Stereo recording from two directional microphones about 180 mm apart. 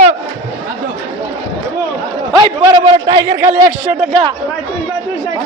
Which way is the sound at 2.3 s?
20° right (ahead or behind).